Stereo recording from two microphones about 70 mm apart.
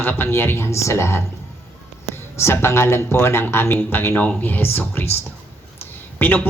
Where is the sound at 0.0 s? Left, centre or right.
Left.